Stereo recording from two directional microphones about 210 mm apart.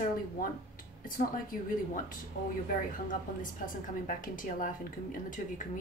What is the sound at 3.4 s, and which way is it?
A woman's voice, 40° left (ahead or behind).